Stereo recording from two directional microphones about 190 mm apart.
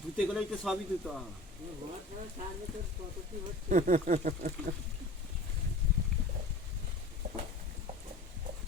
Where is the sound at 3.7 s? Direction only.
45° right (ahead or behind).